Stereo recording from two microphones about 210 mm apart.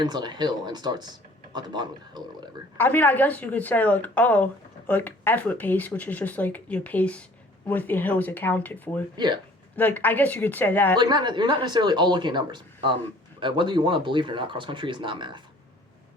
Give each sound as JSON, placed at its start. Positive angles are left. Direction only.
{"t": 0.0, "sound": "speech", "side_deg": -20}
{"t": 2.7, "sound": "speech", "side_deg": 10}
{"t": 9.1, "sound": "speech", "side_deg": -20}
{"t": 9.7, "sound": "speech", "side_deg": 10}
{"t": 10.9, "sound": "speech", "side_deg": -20}